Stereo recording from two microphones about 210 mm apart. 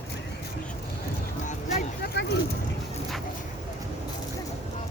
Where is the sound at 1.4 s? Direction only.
40° left (ahead or behind).